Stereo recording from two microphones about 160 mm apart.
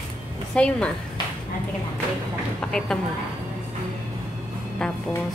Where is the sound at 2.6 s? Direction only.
5° left (ahead or behind).